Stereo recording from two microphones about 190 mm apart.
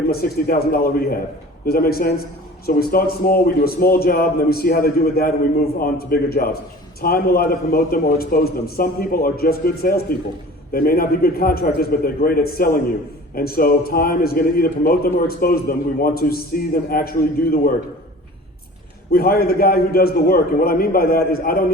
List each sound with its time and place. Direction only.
0.1 s a man's voice: 55° left (ahead or behind)
19.1 s a man's voice: 55° left (ahead or behind)